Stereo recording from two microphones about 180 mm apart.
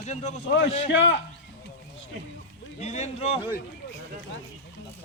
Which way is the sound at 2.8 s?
35° left (ahead or behind).